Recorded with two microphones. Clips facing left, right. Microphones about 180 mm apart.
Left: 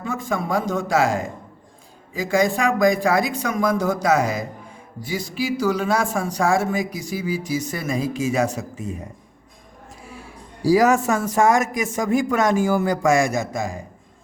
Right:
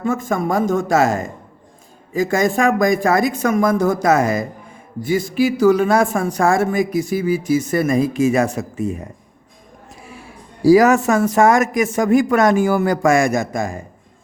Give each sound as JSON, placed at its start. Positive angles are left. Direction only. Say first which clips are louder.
{"t": 0.0, "sound": "speech", "louder": "right 6 dB", "side_deg": -50}
{"t": 10.6, "sound": "speech", "louder": "right 5 dB", "side_deg": -70}